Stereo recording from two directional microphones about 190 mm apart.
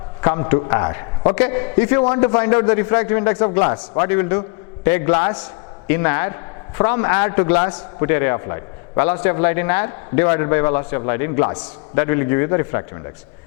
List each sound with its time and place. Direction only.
0.2 s a man's voice: 20° left (ahead or behind)
7.5 s a man's voice: 30° left (ahead or behind)
8.0 s a man's voice: 15° left (ahead or behind)